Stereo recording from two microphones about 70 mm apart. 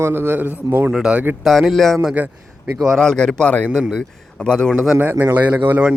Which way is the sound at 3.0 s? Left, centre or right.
Centre.